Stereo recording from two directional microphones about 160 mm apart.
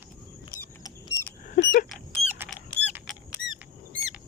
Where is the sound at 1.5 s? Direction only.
60° left (ahead or behind).